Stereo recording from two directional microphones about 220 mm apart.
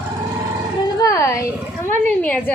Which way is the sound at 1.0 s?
15° left (ahead or behind).